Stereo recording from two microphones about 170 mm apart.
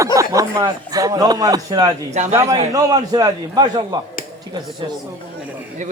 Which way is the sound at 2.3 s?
20° right (ahead or behind).